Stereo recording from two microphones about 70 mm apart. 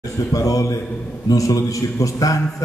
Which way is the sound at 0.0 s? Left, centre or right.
Left.